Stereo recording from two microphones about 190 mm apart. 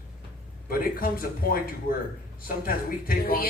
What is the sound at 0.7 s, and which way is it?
Speech, 50° left (ahead or behind).